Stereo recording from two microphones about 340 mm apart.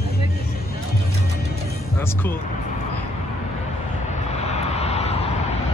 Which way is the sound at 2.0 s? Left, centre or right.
Centre.